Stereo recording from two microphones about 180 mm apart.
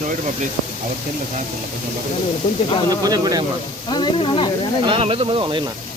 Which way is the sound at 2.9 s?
20° right (ahead or behind).